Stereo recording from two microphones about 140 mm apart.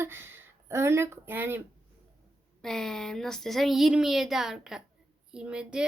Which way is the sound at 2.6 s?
5° left (ahead or behind).